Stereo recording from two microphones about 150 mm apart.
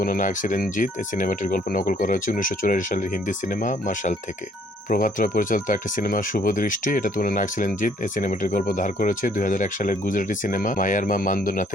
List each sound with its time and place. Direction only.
0.0 s speech: 65° left (ahead or behind)